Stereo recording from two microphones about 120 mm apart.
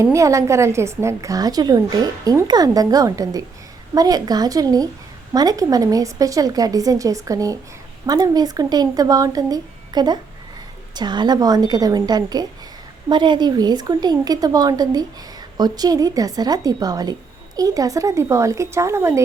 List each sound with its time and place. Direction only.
0.0 s a woman's voice: 25° right (ahead or behind)